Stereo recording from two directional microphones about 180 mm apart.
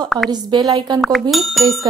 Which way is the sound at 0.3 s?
25° right (ahead or behind).